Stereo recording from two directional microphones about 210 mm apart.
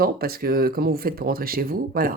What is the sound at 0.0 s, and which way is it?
Speech, 45° right (ahead or behind).